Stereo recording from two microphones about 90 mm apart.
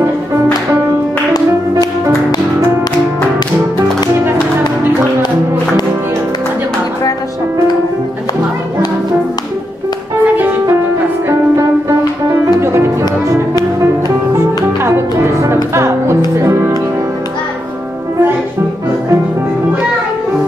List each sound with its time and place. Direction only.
10.2 s music: 20° right (ahead or behind)
14.8 s music: 30° right (ahead or behind)